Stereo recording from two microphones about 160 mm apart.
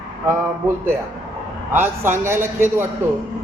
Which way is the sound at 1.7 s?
15° right (ahead or behind).